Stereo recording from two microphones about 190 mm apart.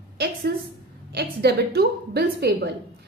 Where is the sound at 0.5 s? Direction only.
60° right (ahead or behind).